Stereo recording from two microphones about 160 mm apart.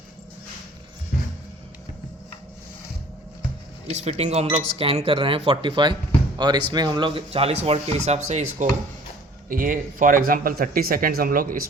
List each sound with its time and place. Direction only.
3.8 s speech: 40° right (ahead or behind)
9.5 s speech: 60° right (ahead or behind)